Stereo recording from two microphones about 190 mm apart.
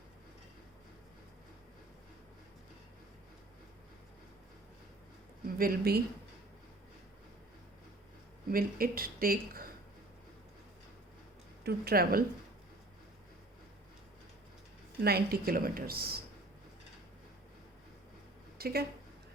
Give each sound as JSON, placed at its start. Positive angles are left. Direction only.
{"t": 5.5, "sound": "speech", "side_deg": -50}
{"t": 8.4, "sound": "speech", "side_deg": -50}
{"t": 11.6, "sound": "speech", "side_deg": -55}
{"t": 15.0, "sound": "speech", "side_deg": -55}
{"t": 18.5, "sound": "a woman's voice", "side_deg": -55}